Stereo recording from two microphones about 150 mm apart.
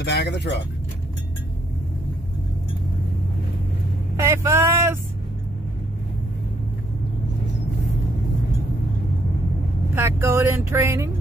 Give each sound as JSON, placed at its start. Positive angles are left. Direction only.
{"t": 0.0, "sound": "speech", "side_deg": 90}
{"t": 4.2, "sound": "speech", "side_deg": -20}
{"t": 9.9, "sound": "speech", "side_deg": -15}